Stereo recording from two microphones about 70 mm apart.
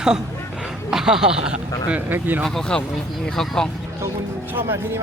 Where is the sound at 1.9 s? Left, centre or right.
Right.